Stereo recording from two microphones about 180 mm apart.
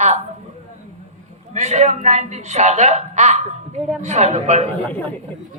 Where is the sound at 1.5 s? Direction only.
40° right (ahead or behind).